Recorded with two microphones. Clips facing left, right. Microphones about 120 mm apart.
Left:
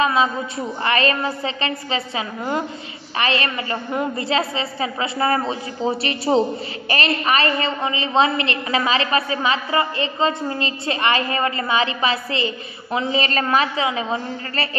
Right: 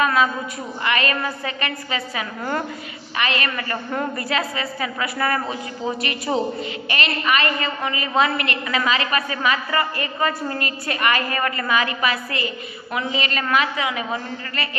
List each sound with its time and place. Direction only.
0.0 s a woman's voice: 25° left (ahead or behind)